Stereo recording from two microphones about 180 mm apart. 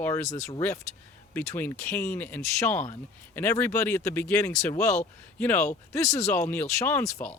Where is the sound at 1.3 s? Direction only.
10° left (ahead or behind).